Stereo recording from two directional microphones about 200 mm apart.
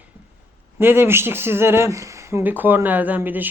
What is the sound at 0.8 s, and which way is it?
Speech, 10° right (ahead or behind).